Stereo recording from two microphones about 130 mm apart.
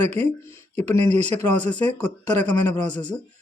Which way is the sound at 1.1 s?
60° right (ahead or behind).